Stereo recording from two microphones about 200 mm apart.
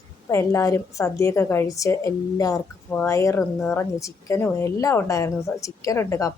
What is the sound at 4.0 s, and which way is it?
Speech, 15° left (ahead or behind).